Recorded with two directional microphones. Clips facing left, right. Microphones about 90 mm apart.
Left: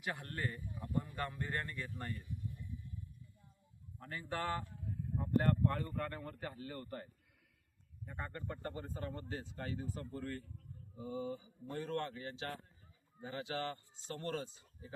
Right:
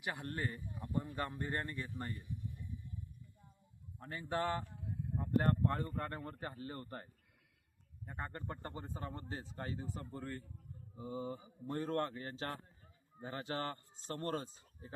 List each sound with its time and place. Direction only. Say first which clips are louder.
0.0 s speech: right 1 dB; 15° right (ahead or behind)
4.0 s speech: right 3 dB; 25° right (ahead or behind)
10.9 s speech: left 1 dB; 35° right (ahead or behind)